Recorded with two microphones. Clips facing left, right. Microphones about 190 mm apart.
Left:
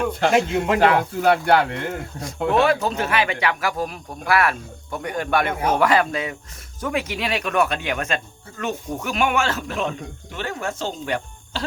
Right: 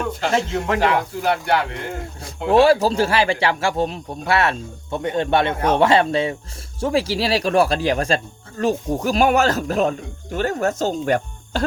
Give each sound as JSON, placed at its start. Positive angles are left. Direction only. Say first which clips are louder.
{"t": 0.3, "sound": "speech", "louder": "even", "side_deg": 20}
{"t": 0.8, "sound": "speech", "louder": "left 2 dB", "side_deg": 55}
{"t": 2.2, "sound": "speech", "louder": "right 4 dB", "side_deg": -30}